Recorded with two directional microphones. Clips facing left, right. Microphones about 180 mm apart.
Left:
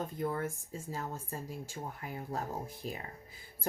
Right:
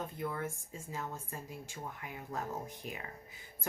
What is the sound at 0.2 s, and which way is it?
A woman's voice, 40° left (ahead or behind).